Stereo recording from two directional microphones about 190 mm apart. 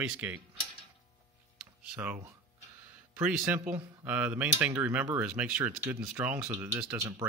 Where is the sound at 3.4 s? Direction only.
10° right (ahead or behind).